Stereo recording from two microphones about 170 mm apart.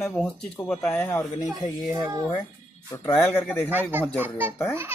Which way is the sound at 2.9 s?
20° left (ahead or behind).